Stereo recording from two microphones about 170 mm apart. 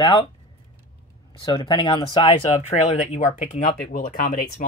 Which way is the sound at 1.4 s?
30° left (ahead or behind).